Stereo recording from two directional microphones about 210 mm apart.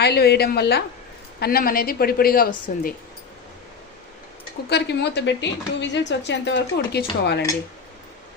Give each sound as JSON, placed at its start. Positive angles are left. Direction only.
{"t": 0.0, "sound": "a woman's voice", "side_deg": 50}
{"t": 4.7, "sound": "a woman's voice", "side_deg": 55}